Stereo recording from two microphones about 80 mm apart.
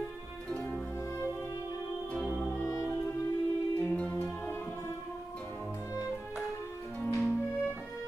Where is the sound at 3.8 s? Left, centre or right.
Centre.